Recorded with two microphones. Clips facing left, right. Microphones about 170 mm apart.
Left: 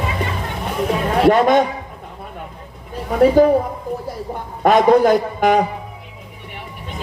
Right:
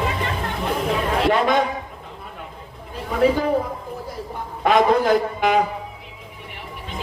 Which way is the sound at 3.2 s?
45° left (ahead or behind).